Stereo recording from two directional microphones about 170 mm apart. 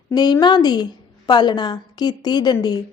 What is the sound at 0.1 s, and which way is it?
A woman's voice, 25° left (ahead or behind).